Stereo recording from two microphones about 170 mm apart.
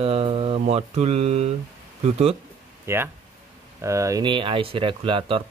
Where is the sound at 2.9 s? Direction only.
15° right (ahead or behind).